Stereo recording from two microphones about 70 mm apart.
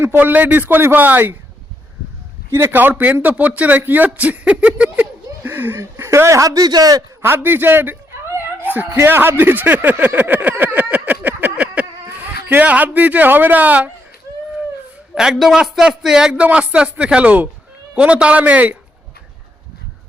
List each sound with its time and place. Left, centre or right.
0.0 s speech: right
2.5 s a man's voice: right
7.2 s a sound: right
9.0 s speech: right
11.5 s a sound: centre
12.0 s speech: right
15.1 s a man's voice: centre; by 18.8 s right